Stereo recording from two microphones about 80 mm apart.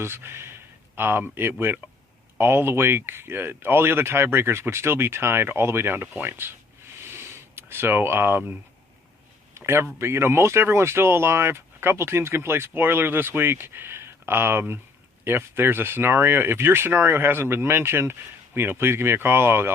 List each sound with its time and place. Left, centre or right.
0.0 s speech: right
7.0 s a sound: right
9.6 s speech: right